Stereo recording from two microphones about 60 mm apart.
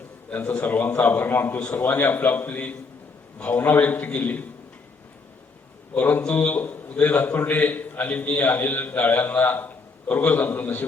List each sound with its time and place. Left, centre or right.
0.3 s a man's voice: left
1.5 s a man's voice: left
5.9 s a man's voice: left